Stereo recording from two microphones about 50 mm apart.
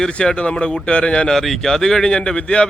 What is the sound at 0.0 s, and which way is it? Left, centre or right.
A man's voice, centre.